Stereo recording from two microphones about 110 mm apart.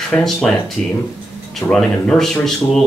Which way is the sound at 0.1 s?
15° left (ahead or behind).